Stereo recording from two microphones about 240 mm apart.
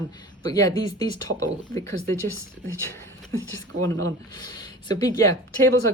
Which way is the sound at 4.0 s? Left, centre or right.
Centre.